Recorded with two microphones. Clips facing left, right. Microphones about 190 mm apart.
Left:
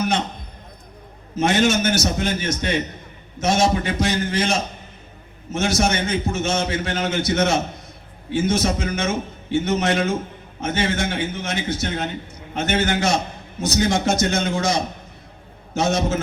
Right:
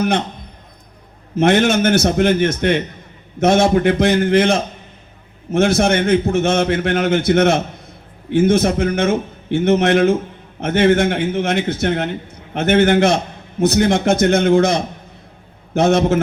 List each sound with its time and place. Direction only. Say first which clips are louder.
1.4 s a man's voice: right 5 dB; 60° right (ahead or behind)